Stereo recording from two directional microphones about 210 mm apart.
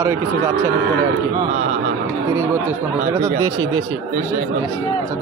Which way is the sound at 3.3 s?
15° right (ahead or behind).